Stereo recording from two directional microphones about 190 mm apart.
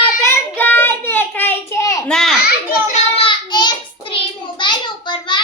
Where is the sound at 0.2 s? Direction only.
10° left (ahead or behind).